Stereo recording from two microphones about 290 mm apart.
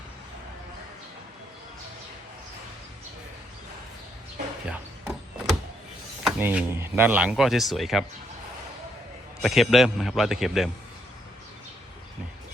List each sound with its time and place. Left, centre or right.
4.7 s a sound: centre
6.2 s speech: centre
9.4 s speech: centre